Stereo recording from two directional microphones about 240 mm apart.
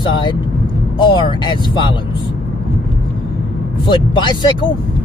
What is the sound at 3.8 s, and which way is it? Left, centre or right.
Speech, centre.